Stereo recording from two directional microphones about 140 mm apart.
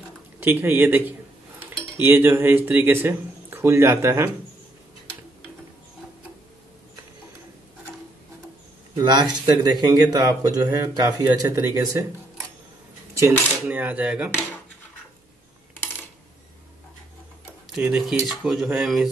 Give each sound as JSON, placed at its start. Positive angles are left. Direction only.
{"t": 0.4, "sound": "speech", "side_deg": -15}
{"t": 9.0, "sound": "speech", "side_deg": -30}
{"t": 13.1, "sound": "speech", "side_deg": -15}
{"t": 17.6, "sound": "speech", "side_deg": -5}